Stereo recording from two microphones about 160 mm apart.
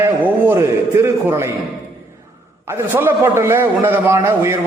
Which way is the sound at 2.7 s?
15° right (ahead or behind).